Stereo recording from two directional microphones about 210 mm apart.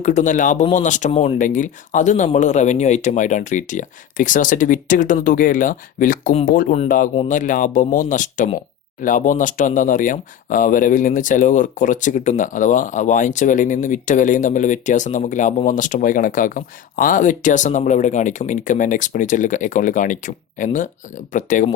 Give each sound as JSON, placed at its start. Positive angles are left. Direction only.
{"t": 0.0, "sound": "speech", "side_deg": 35}